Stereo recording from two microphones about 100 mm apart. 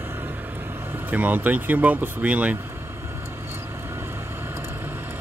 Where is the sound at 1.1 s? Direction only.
15° right (ahead or behind).